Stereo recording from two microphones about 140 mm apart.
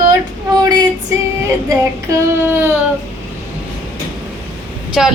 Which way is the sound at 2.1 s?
15° right (ahead or behind).